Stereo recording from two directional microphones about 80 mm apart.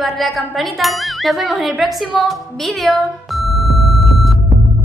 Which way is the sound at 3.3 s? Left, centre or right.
Centre.